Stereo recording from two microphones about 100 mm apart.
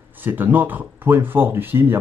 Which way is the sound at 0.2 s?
20° right (ahead or behind).